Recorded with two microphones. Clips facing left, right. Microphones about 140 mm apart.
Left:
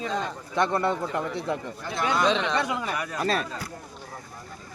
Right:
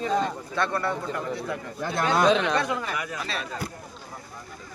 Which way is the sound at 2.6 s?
15° left (ahead or behind).